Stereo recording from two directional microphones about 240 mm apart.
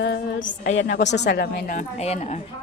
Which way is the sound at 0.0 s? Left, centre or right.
Left.